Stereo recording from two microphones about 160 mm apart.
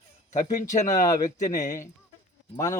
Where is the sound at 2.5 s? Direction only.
20° left (ahead or behind).